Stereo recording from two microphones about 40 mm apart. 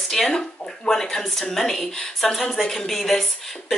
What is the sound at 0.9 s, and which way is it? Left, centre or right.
Speech, centre.